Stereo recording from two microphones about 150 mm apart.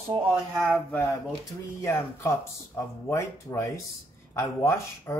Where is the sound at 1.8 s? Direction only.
20° left (ahead or behind).